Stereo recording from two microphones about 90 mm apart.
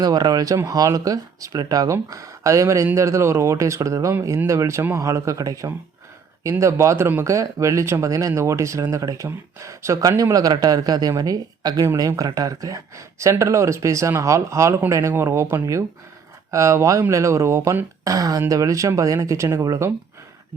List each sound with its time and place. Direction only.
0.0 s speech: 45° right (ahead or behind)